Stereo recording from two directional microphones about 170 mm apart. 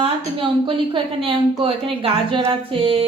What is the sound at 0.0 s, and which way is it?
Speech, 30° right (ahead or behind).